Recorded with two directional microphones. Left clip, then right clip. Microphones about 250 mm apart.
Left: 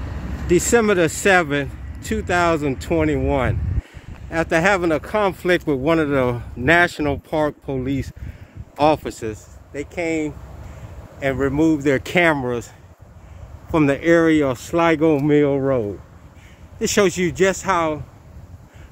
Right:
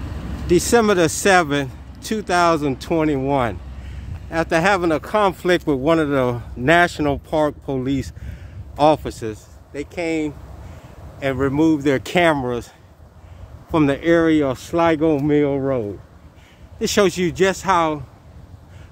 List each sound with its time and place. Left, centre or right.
0.0 s vehicle: right
0.5 s speech: centre
8.7 s speech: centre
16.7 s speech: centre